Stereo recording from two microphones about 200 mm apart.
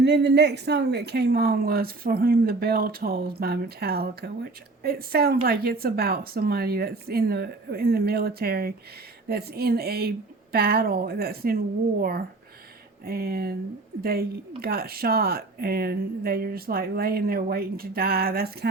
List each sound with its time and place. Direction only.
0.0 s speech: 55° right (ahead or behind)